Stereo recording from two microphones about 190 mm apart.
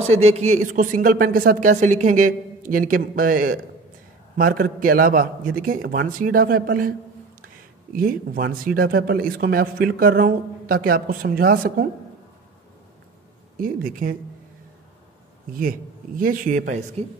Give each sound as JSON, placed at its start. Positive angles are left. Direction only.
{"t": 0.0, "sound": "speech", "side_deg": -35}
{"t": 7.9, "sound": "speech", "side_deg": -50}
{"t": 13.6, "sound": "speech", "side_deg": -45}
{"t": 16.2, "sound": "speech", "side_deg": -45}